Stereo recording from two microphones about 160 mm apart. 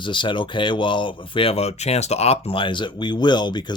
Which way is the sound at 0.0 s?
30° left (ahead or behind).